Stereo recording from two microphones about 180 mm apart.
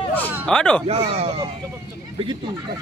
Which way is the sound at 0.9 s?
35° right (ahead or behind).